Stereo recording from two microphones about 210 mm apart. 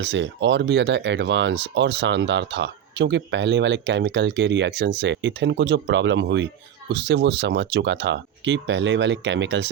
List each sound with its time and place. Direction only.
0.0 s speech: 55° right (ahead or behind)